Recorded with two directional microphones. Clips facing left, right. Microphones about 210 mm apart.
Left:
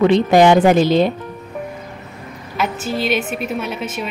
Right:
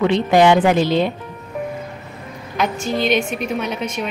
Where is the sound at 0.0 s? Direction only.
40° left (ahead or behind).